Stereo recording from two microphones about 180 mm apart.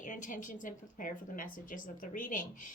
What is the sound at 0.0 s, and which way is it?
Speech, 45° left (ahead or behind).